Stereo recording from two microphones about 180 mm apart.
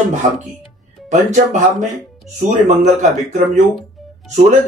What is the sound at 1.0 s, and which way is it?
Speech, 40° right (ahead or behind).